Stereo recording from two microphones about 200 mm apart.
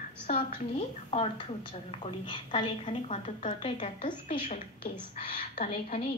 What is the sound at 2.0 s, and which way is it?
A woman's voice, 25° left (ahead or behind).